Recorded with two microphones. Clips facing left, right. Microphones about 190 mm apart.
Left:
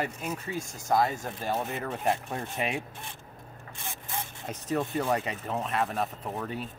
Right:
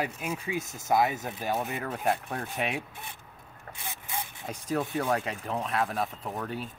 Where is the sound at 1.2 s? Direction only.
5° right (ahead or behind).